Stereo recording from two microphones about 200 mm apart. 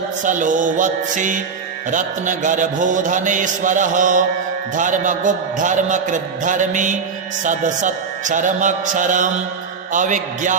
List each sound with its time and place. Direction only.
0.3 s a man's voice: 40° right (ahead or behind)